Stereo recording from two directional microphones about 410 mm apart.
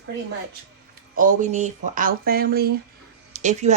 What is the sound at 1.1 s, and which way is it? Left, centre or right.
A woman's voice, centre.